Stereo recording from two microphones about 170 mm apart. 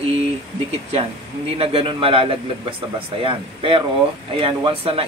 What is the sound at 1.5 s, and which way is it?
A man's voice, 35° right (ahead or behind).